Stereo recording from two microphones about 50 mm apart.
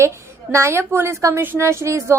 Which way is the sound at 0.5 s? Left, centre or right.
Right.